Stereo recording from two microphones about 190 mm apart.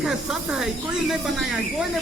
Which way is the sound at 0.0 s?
Centre (ahead or behind).